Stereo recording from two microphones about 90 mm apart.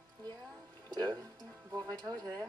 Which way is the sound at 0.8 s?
50° right (ahead or behind).